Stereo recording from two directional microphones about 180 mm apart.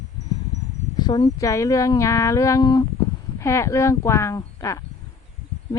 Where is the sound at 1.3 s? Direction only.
15° left (ahead or behind).